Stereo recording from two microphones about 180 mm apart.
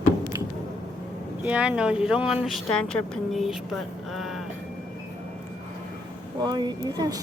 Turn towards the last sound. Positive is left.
turn(degrees=-20)  # may be behind; listen again after turning